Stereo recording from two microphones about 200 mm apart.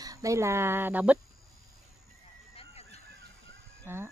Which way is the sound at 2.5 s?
30° left (ahead or behind).